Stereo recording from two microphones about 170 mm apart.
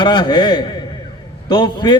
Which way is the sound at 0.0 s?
25° left (ahead or behind).